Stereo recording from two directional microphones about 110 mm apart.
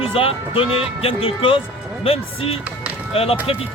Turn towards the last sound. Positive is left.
turn(degrees=60)  # may be behind; listen again after turning